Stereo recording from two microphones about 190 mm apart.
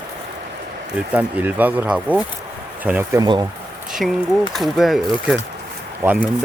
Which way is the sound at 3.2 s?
20° right (ahead or behind).